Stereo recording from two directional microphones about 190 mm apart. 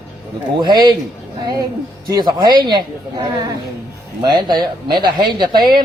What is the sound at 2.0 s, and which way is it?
Speech, 20° right (ahead or behind).